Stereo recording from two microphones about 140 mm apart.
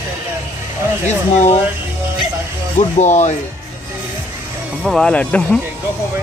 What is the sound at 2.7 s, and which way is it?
Speech, 55° left (ahead or behind).